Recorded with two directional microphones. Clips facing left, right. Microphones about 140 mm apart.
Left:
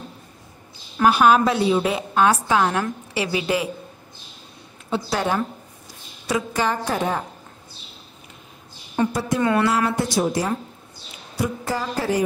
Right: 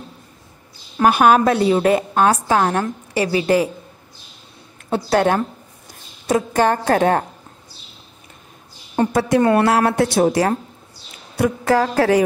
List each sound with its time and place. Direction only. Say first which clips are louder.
1.0 s a woman's voice: right 2 dB; 50° right (ahead or behind)
4.9 s a woman's voice: right 6 dB; 60° right (ahead or behind)
6.2 s a woman's voice: right 6 dB; 50° right (ahead or behind)
9.0 s a woman's voice: right 3 dB; 45° right (ahead or behind)
9.4 s a woman's voice: right 3 dB; 35° right (ahead or behind)
9.7 s a woman's voice: right 5 dB; 70° right (ahead or behind)